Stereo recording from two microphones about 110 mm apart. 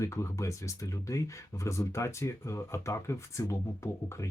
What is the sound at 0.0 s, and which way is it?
Speech, 25° left (ahead or behind).